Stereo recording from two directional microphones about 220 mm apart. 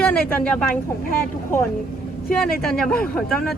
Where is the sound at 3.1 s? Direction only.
Centre (ahead or behind).